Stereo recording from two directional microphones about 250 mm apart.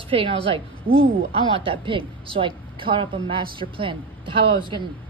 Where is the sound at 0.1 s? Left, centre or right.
Right.